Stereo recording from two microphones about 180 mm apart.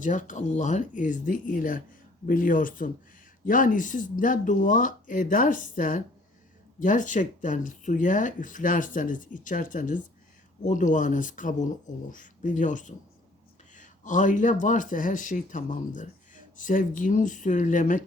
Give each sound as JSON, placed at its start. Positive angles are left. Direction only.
{"t": 0.0, "sound": "speech", "side_deg": 45}